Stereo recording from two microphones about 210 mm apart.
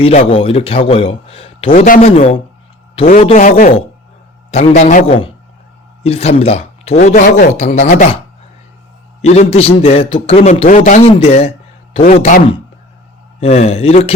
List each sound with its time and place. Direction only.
0.3 s a man's voice: 25° left (ahead or behind)
9.2 s a man's voice: 30° left (ahead or behind)